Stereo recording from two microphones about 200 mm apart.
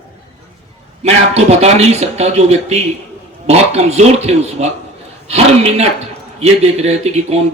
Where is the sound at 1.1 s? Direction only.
35° right (ahead or behind).